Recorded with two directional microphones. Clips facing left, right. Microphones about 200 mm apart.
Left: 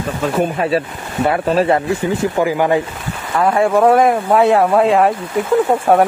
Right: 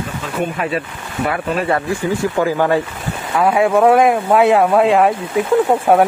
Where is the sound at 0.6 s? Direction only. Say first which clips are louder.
Left 4 dB; 30° left (ahead or behind); by 2.8 s 15° left (ahead or behind).